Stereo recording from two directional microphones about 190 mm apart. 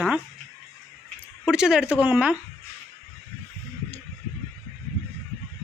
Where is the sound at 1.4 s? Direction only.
5° right (ahead or behind).